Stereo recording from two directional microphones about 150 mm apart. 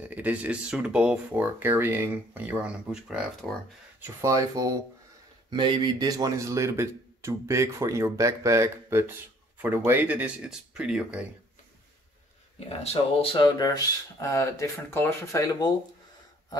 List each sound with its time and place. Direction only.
0.0 s speech: 10° right (ahead or behind)
4.0 s speech: 20° right (ahead or behind)
12.5 s speech: 40° left (ahead or behind); by 15.7 s 20° left (ahead or behind)